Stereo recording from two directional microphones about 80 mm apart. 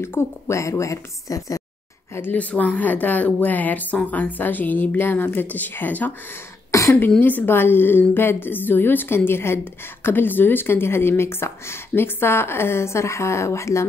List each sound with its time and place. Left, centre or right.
0.0 s speech: left
2.3 s speech: centre
6.7 s throat clearing: left
7.2 s speech: left